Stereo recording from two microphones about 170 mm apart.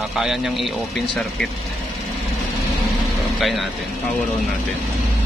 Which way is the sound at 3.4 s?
Centre (ahead or behind).